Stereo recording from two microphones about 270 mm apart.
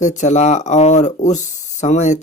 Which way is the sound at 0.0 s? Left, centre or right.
Left.